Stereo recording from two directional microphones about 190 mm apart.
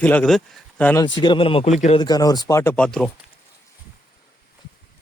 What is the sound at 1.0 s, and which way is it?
Speech, 25° left (ahead or behind).